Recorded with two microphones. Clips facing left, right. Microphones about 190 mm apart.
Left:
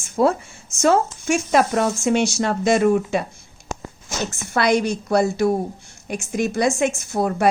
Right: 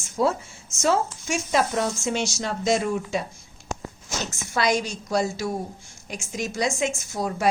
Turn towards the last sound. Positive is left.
turn(degrees=60)  # may be behind; listen again after turning